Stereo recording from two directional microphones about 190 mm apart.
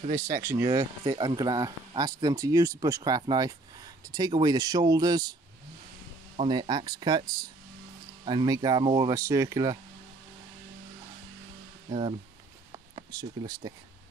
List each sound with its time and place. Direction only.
0.1 s speech: 15° right (ahead or behind)
6.3 s speech: 25° right (ahead or behind)
11.9 s speech: 30° right (ahead or behind)